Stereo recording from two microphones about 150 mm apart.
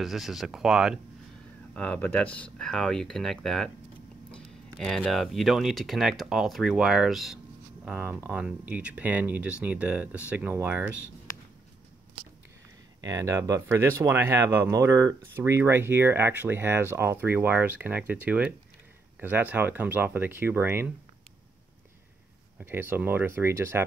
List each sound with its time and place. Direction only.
0.0 s speech: centre (ahead or behind)
1.7 s speech: 10° left (ahead or behind); by 10.9 s 15° right (ahead or behind)
13.0 s speech: 20° right (ahead or behind)
22.6 s speech: 15° right (ahead or behind)